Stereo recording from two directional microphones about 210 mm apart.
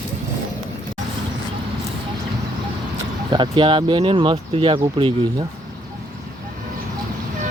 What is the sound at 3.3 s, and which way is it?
Speech, 20° right (ahead or behind).